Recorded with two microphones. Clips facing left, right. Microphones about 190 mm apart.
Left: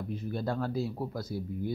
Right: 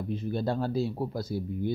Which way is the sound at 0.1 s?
25° right (ahead or behind).